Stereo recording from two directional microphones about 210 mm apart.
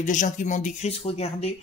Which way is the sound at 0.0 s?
35° left (ahead or behind).